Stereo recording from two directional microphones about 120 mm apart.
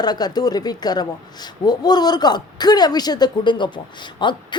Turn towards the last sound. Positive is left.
turn(degrees=40)  # may be behind; listen again after turning